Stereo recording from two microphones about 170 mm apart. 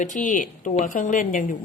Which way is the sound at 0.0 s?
45° left (ahead or behind).